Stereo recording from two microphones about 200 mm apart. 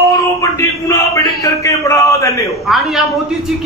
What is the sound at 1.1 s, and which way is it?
A man's voice, 15° left (ahead or behind).